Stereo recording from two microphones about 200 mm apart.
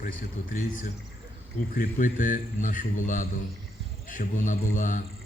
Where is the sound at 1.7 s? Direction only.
45° left (ahead or behind).